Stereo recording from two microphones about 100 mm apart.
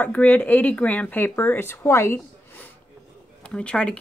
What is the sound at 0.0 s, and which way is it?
Speech, 15° left (ahead or behind).